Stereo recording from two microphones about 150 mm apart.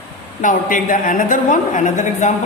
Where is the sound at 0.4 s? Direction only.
60° left (ahead or behind).